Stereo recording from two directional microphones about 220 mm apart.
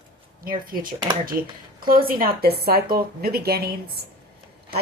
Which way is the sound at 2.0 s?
40° right (ahead or behind).